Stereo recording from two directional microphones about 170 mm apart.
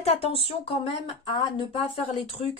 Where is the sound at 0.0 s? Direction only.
35° left (ahead or behind).